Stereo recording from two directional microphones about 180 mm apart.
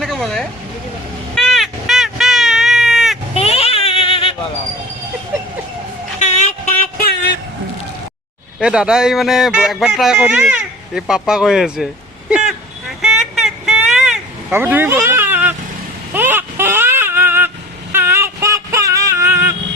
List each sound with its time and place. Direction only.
0.0 s a sound: centre (ahead or behind)
3.3 s baby cry: 35° left (ahead or behind)
6.1 s vehicle: 40° left (ahead or behind)
7.0 s vehicle: 65° left (ahead or behind)
8.5 s speech: 5° right (ahead or behind)
13.0 s vehicle: centre (ahead or behind)
16.1 s a sound: 10° right (ahead or behind)